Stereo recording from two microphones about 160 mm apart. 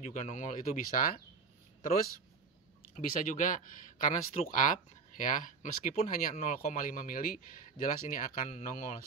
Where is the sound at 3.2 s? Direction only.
55° left (ahead or behind).